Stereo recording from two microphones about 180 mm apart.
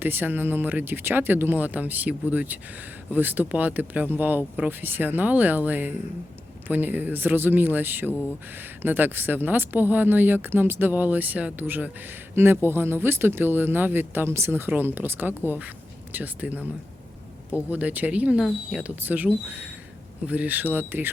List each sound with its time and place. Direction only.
0.0 s speech: 10° right (ahead or behind)
17.7 s speech: 10° right (ahead or behind)